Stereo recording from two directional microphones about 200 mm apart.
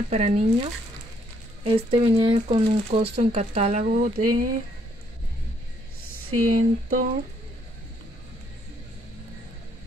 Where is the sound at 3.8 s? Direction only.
45° right (ahead or behind).